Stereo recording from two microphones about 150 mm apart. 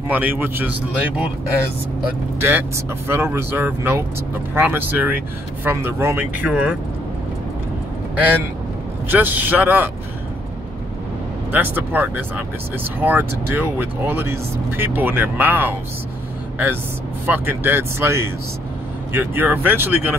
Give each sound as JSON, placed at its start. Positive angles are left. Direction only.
{"t": 0.1, "sound": "speech", "side_deg": -15}
{"t": 2.4, "sound": "speech", "side_deg": -15}
{"t": 9.1, "sound": "speech", "side_deg": -10}
{"t": 11.5, "sound": "speech", "side_deg": -10}
{"t": 17.3, "sound": "speech", "side_deg": -15}